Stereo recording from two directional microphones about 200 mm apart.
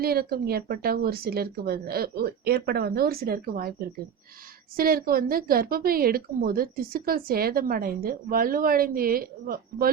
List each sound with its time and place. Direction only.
0.0 s a woman's voice: 50° right (ahead or behind)